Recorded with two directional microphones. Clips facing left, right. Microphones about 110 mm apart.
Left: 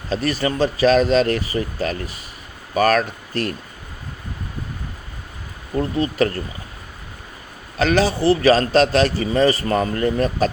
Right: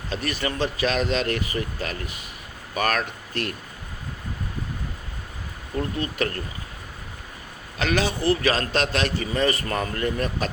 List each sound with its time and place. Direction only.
0.1 s a man's voice: 35° left (ahead or behind)
6.0 s a man's voice: 30° left (ahead or behind)
7.8 s a man's voice: 35° left (ahead or behind)